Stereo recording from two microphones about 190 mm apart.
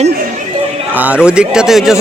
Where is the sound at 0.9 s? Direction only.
5° right (ahead or behind).